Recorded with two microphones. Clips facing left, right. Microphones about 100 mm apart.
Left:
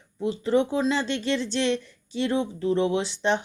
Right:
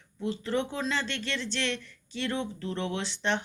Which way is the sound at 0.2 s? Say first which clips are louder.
Left 7 dB; 15° left (ahead or behind).